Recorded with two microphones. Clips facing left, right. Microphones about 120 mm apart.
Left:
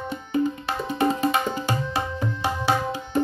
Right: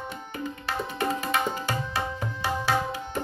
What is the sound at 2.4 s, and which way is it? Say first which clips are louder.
Tabla: left 2 dB; 20° left (ahead or behind).